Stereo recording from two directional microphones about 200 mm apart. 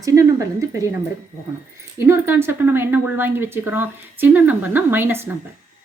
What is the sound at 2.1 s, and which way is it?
Speech, 10° right (ahead or behind).